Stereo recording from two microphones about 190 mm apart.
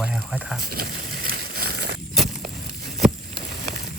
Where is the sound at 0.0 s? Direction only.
5° right (ahead or behind).